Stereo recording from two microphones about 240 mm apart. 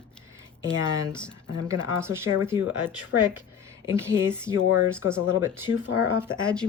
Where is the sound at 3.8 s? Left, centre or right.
Centre.